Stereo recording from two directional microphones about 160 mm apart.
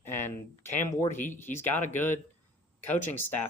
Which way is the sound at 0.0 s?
15° left (ahead or behind).